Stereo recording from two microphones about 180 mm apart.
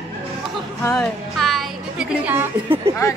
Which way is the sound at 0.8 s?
5° left (ahead or behind).